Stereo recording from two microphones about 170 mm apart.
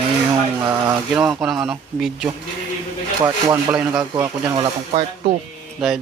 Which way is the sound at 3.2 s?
20° right (ahead or behind).